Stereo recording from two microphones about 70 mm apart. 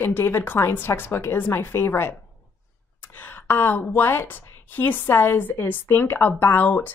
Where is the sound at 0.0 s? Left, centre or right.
Left.